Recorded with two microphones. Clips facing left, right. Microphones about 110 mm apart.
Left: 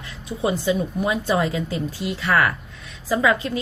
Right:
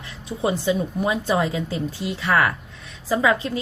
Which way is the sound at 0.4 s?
25° right (ahead or behind).